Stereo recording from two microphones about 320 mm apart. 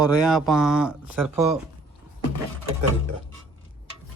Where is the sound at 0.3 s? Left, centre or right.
Centre.